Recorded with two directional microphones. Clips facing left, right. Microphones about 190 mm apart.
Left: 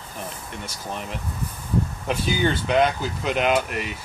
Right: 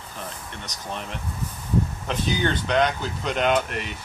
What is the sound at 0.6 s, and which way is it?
Speech, 5° left (ahead or behind).